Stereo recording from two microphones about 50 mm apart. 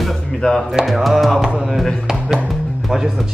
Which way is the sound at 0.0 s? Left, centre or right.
Centre.